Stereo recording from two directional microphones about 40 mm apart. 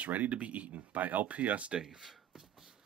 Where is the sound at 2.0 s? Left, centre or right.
Centre.